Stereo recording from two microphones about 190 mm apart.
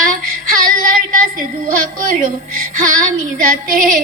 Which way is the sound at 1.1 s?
45° right (ahead or behind).